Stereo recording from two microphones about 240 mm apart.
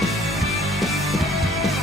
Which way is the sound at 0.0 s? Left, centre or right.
Centre.